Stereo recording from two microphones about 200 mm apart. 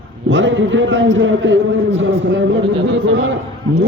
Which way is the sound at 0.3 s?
65° right (ahead or behind).